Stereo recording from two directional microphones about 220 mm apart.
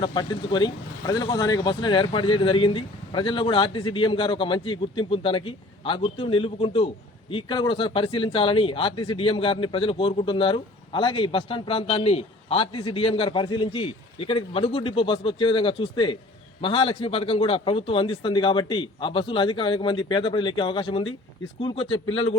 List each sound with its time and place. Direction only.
0.0 s speech: 20° left (ahead or behind)